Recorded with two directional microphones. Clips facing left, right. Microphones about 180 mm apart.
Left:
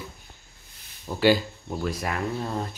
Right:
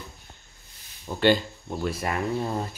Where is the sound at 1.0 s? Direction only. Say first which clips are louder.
Left 1 dB; 5° left (ahead or behind).